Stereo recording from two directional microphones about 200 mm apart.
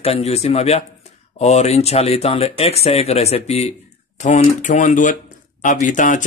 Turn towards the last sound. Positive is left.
turn(degrees=40)  # may be behind; listen again after turning